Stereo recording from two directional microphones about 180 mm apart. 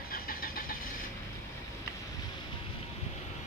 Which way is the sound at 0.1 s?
55° left (ahead or behind).